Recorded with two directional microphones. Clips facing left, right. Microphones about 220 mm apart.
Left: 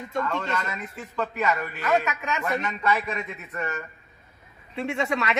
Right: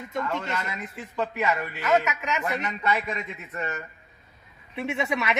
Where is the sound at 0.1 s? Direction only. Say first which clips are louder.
Left 2 dB; 20° right (ahead or behind).